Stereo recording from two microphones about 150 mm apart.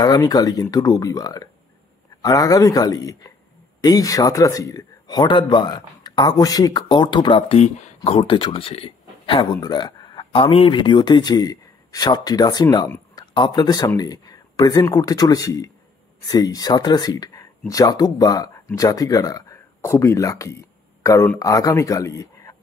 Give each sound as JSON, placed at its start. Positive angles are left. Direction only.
{"t": 0.0, "sound": "speech", "side_deg": 25}
{"t": 7.5, "sound": "speech", "side_deg": 50}